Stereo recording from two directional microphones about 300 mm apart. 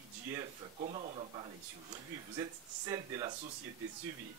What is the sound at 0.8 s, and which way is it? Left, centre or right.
Speech, centre.